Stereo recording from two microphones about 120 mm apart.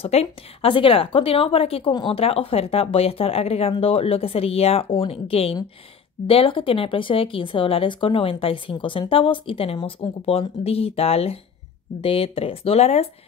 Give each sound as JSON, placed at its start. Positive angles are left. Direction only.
{"t": 0.0, "sound": "speech", "side_deg": 55}